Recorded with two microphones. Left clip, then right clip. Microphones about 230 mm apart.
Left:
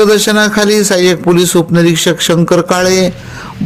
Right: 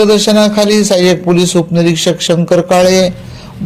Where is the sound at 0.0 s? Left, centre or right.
Left.